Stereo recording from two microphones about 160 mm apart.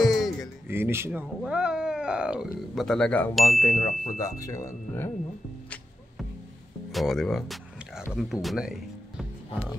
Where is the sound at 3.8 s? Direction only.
50° left (ahead or behind).